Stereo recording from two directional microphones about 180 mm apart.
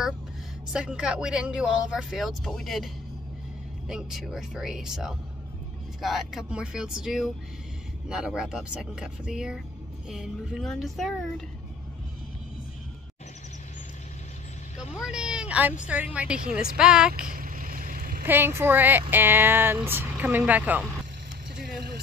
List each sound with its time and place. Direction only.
0.7 s speech: 5° right (ahead or behind)
14.8 s speech: 5° right (ahead or behind)
17.4 s a sound: 50° right (ahead or behind)
18.2 s speech: 10° right (ahead or behind)